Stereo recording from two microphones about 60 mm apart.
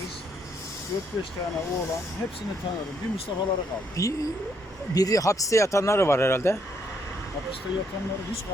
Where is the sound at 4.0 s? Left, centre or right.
Left.